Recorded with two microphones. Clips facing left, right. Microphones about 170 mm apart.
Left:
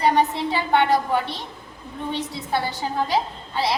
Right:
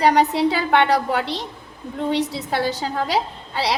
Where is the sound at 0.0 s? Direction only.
80° right.